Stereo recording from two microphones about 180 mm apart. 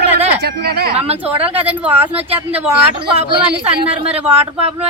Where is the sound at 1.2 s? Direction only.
10° right (ahead or behind).